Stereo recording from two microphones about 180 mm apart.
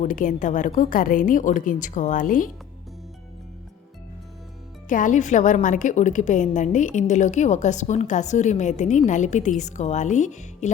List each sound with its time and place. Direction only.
0.0 s a woman's voice: 45° left (ahead or behind)
4.9 s a woman's voice: 45° left (ahead or behind)